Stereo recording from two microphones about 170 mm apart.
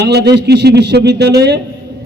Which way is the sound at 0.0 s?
75° right (ahead or behind).